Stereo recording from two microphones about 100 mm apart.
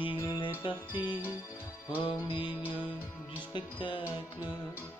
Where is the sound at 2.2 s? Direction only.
50° left (ahead or behind).